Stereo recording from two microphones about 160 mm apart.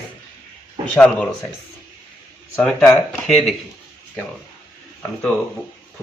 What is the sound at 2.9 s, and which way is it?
Speech, centre (ahead or behind).